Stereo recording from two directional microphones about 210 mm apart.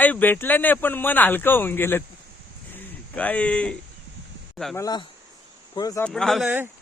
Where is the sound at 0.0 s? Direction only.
10° left (ahead or behind).